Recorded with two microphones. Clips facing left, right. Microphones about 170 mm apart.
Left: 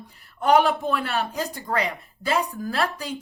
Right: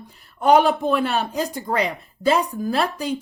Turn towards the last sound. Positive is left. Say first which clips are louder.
# right 4 dB
turn(degrees=-20)  # may be behind; listen again after turning